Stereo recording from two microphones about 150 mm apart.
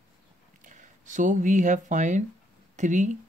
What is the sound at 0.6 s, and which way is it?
Speech, 55° right (ahead or behind).